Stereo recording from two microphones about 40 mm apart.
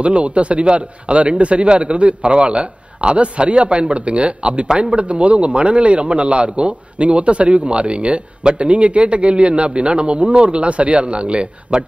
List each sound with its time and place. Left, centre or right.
0.0 s a man's voice: right